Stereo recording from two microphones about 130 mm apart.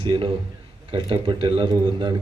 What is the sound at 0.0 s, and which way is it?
A man's voice, 40° right (ahead or behind).